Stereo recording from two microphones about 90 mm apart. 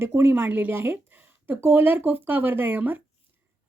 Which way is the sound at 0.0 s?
30° right (ahead or behind).